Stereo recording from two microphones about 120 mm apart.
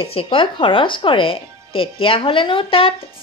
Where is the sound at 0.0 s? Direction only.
50° left (ahead or behind).